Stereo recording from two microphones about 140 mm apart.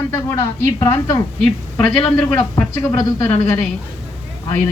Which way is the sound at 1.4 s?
10° left (ahead or behind).